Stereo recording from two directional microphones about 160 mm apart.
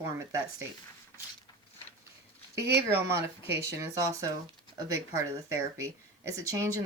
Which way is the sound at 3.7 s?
20° right (ahead or behind).